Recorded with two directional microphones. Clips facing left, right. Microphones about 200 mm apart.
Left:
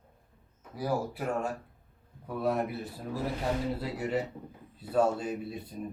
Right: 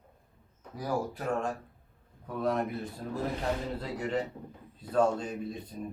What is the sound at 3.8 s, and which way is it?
Speech, 5° left (ahead or behind).